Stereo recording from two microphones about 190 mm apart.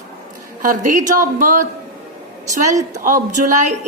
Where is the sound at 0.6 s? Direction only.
40° right (ahead or behind).